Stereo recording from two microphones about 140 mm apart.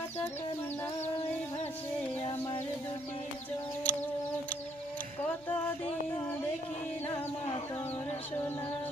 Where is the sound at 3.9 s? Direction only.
10° left (ahead or behind).